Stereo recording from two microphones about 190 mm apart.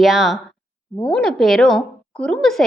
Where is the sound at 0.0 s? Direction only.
Centre (ahead or behind).